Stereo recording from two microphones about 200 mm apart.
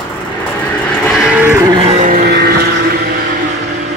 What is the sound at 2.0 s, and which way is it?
Vehicle, 45° right (ahead or behind).